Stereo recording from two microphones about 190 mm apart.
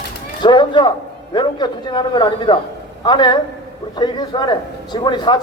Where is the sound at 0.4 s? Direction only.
25° left (ahead or behind).